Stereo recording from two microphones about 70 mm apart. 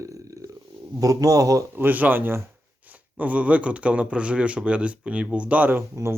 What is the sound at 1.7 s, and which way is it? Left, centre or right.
Speech, right.